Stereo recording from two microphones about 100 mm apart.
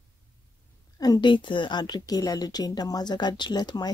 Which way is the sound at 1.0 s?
45° left (ahead or behind).